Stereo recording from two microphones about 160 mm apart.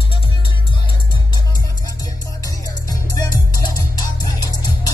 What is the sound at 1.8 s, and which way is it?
Music, 20° left (ahead or behind).